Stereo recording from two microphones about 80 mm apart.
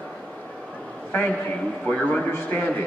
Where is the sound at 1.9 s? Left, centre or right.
Centre.